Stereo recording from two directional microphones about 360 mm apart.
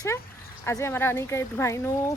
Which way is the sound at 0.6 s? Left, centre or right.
Centre.